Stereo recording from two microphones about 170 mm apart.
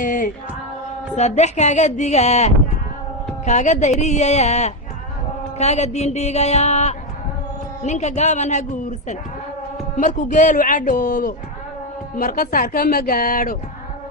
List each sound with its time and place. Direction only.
0.0 s music: 50° left (ahead or behind)
1.1 s speech: 40° left (ahead or behind)